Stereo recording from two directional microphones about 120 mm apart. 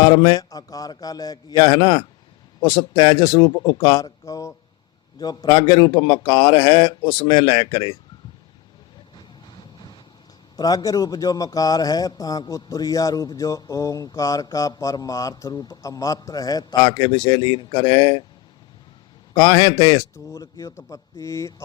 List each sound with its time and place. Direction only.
0.0 s a man's voice: 35° left (ahead or behind)
10.6 s a man's voice: 30° left (ahead or behind)
19.3 s a man's voice: 35° left (ahead or behind)